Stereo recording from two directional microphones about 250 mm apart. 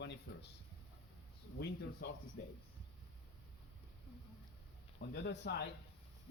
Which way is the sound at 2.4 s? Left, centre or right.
Left.